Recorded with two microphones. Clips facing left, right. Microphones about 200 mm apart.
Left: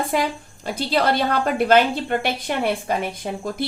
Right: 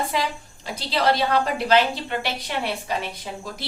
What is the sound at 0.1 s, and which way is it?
A woman's voice, 50° left (ahead or behind).